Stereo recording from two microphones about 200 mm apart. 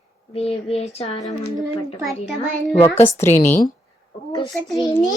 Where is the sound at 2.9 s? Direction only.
10° left (ahead or behind).